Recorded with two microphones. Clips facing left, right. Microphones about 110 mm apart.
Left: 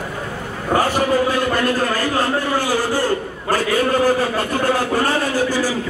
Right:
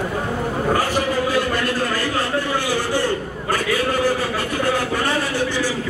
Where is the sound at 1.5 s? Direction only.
45° left (ahead or behind).